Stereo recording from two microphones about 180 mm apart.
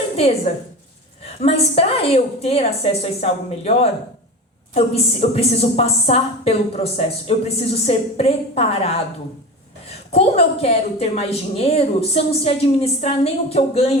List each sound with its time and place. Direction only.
0.2 s a woman's voice: 35° left (ahead or behind)
5.3 s a woman's voice: 35° left (ahead or behind)
10.1 s a woman's voice: 35° left (ahead or behind)